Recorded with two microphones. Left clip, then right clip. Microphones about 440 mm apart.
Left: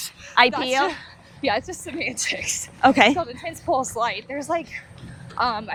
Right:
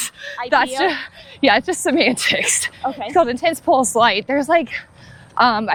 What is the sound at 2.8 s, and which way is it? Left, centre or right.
Speech, left.